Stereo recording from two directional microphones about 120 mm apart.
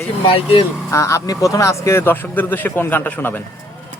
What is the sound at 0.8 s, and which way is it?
A man's voice, 25° left (ahead or behind).